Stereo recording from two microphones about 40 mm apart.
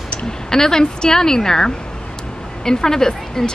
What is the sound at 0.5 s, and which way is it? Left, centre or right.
Speech, centre.